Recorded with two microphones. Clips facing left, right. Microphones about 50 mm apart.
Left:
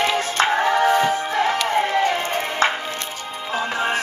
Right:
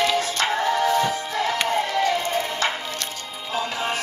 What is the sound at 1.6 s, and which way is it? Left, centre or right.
Chop, left.